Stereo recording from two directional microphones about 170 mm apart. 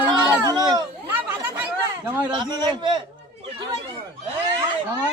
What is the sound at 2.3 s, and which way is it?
Speech, 25° right (ahead or behind).